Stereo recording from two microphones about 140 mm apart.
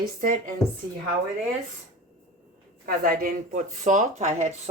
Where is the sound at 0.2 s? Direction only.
75° right (ahead or behind).